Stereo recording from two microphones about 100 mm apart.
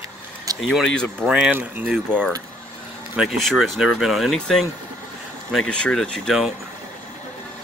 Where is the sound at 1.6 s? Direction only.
15° right (ahead or behind).